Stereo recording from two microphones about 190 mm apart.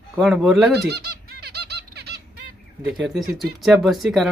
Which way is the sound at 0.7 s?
55° right (ahead or behind).